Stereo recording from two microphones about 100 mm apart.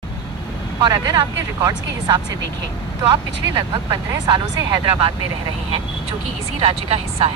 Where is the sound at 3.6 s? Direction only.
50° right (ahead or behind).